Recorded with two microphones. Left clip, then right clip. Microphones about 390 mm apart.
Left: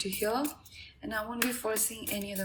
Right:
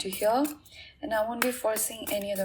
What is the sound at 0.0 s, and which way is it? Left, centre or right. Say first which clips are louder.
Speech: right 5 dB; right.